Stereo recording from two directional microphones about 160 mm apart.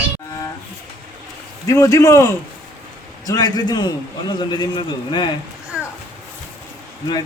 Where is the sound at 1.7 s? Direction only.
20° left (ahead or behind).